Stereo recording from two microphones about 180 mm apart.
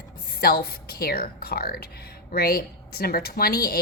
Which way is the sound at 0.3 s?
60° left (ahead or behind).